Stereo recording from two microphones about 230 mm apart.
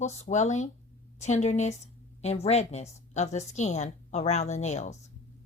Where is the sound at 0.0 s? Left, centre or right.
Left.